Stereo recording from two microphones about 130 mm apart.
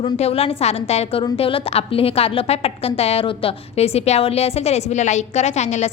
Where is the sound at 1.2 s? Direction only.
45° left (ahead or behind); by 5.9 s 60° left (ahead or behind).